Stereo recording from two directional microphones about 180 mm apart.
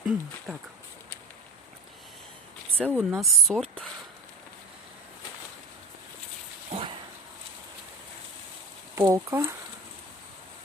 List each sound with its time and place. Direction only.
0.0 s speech: 5° right (ahead or behind)
2.9 s speech: centre (ahead or behind)
6.7 s dog: 35° right (ahead or behind)
9.0 s speech: 15° right (ahead or behind)